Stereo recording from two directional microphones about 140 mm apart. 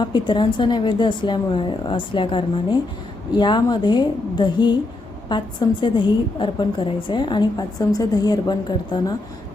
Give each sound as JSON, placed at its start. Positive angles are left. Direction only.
{"t": 0.0, "sound": "a woman's voice", "side_deg": 35}